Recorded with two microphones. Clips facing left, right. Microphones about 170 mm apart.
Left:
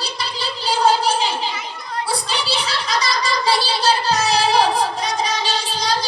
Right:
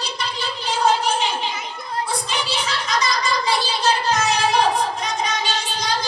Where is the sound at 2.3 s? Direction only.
35° left (ahead or behind).